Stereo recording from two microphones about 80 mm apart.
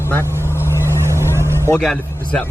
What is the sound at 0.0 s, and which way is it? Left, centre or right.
Speech, left.